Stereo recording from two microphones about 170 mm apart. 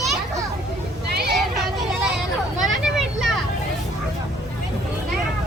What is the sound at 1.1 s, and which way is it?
Vehicle, 70° right (ahead or behind).